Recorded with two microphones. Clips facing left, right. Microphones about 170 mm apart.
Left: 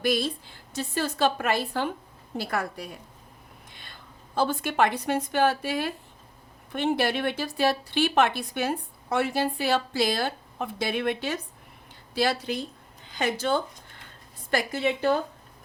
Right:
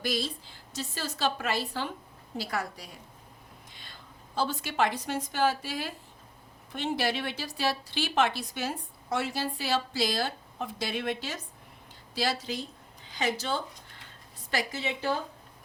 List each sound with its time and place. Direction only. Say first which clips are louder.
0.0 s speech: left 6 dB; 55° left (ahead or behind)
3.7 s a sound: left 2 dB; 60° left (ahead or behind)
4.4 s speech: left 5 dB; 55° left (ahead or behind)